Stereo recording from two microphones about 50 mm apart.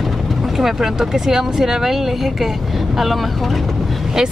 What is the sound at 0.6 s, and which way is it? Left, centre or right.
Speech, centre.